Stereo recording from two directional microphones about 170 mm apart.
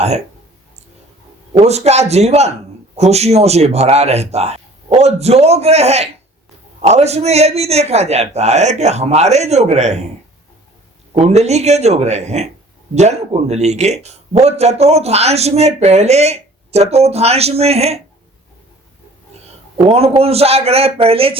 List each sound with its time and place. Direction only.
1.5 s a man's voice: 40° right (ahead or behind)
11.1 s a man's voice: 40° right (ahead or behind)
19.7 s a man's voice: 35° right (ahead or behind)